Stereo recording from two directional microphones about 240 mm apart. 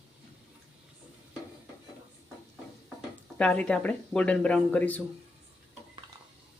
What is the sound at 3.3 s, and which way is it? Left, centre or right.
Speech, centre.